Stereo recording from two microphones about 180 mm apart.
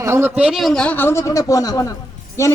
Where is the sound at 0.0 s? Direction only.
15° right (ahead or behind).